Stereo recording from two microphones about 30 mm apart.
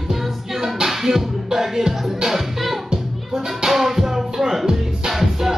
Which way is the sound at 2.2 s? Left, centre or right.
Centre.